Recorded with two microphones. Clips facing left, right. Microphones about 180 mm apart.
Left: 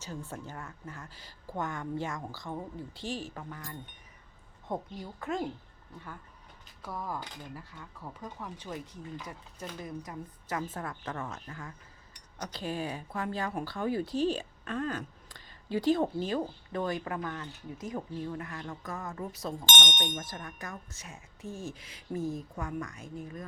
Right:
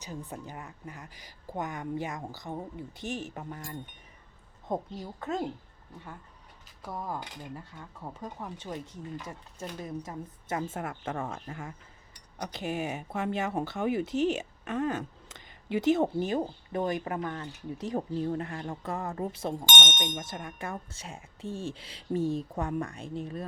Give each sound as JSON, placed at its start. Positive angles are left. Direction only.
{"t": 0.0, "sound": "a woman's voice", "side_deg": -15}
{"t": 6.8, "sound": "a woman's voice", "side_deg": -20}